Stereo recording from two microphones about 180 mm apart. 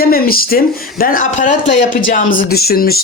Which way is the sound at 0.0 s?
55° left (ahead or behind).